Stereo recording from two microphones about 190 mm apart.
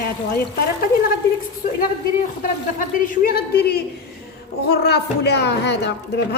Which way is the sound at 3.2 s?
55° left (ahead or behind).